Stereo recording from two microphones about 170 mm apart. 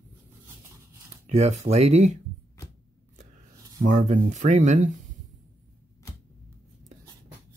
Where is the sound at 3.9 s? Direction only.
45° right (ahead or behind).